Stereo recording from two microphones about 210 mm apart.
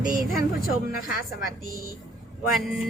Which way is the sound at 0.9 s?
45° left (ahead or behind).